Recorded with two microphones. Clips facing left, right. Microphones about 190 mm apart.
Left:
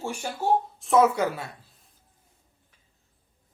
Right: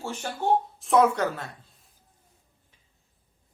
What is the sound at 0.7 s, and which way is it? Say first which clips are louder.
A woman's voice: left 1 dB; centre (ahead or behind).